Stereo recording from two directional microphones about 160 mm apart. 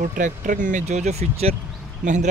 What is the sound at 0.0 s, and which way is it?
Speech, 55° right (ahead or behind).